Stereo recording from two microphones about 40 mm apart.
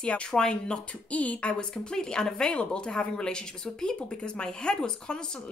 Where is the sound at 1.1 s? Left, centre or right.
Left.